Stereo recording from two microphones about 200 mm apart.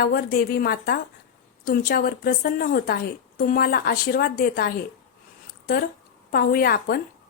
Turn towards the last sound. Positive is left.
turn(degrees=50)  # may be behind; listen again after turning